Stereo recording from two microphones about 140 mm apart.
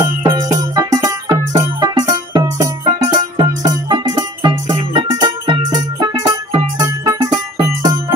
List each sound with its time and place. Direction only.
0.0 s music: 25° right (ahead or behind)